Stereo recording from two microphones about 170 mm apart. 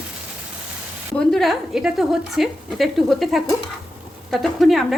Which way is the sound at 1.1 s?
Centre (ahead or behind).